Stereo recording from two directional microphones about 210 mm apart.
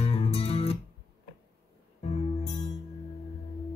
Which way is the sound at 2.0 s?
35° left (ahead or behind).